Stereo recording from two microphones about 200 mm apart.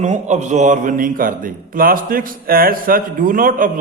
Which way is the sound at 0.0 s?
35° right (ahead or behind).